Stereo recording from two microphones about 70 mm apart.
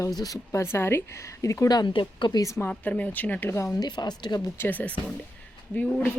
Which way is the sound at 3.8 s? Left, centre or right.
Left.